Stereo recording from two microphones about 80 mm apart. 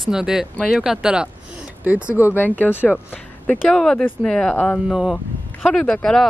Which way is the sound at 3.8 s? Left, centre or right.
Centre.